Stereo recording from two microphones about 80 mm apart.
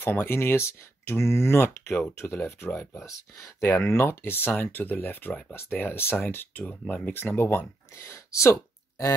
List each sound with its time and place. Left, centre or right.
0.0 s speech: left
3.8 s speech: left
6.6 s speech: centre; by 9.1 s left